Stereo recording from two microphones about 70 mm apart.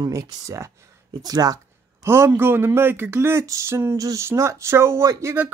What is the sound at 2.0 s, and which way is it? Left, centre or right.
Speech, right.